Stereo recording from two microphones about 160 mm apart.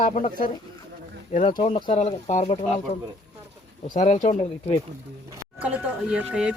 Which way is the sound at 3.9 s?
50° left (ahead or behind).